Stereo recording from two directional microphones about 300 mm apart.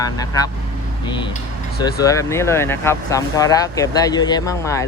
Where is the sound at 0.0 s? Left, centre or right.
Centre.